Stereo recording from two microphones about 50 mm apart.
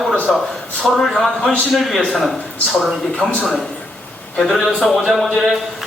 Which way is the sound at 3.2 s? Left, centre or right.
Centre.